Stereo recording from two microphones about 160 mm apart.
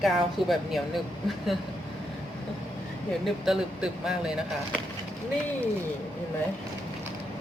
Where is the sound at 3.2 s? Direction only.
5° right (ahead or behind).